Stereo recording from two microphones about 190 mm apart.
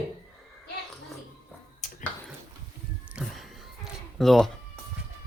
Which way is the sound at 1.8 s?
40° left (ahead or behind).